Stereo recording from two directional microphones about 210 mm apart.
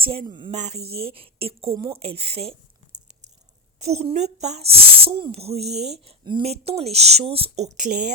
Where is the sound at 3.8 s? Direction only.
30° right (ahead or behind).